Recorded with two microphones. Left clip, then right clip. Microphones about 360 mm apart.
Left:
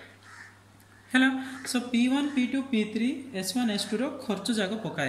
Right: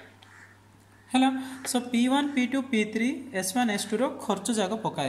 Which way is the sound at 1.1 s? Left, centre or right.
Centre.